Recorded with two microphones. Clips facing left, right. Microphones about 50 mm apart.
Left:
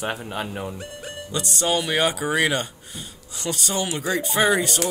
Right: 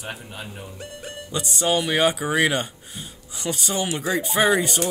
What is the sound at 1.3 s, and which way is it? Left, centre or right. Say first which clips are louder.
Speech: right 1 dB; centre.